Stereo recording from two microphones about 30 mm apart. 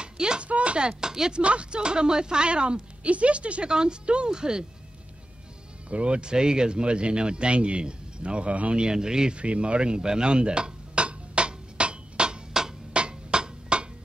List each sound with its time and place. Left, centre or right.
0.0 s a sound: right
0.4 s speech: right
0.7 s speech: right
3.6 s speech: right
4.3 s speech: right
5.9 s speech: right
8.7 s speech: right
9.3 s dishes: right
12.9 s a sound: right